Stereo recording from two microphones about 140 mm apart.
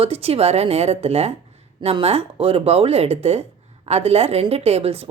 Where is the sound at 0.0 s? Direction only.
45° right (ahead or behind).